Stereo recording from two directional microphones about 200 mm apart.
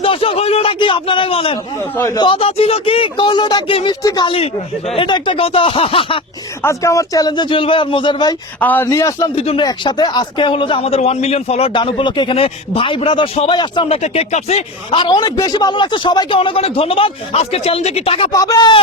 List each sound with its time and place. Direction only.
0.0 s a sound: 25° left (ahead or behind)
2.0 s speech: 15° left (ahead or behind)
6.6 s speech: 15° left (ahead or behind)
8.6 s speech: 10° left (ahead or behind)
9.3 s speech: 30° left (ahead or behind)
18.3 s speech: 20° left (ahead or behind)